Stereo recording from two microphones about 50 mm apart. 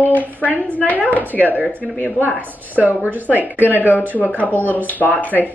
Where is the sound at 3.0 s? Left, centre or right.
Right.